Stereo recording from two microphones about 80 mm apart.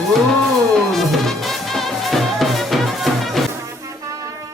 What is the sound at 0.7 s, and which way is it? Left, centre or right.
Music, centre.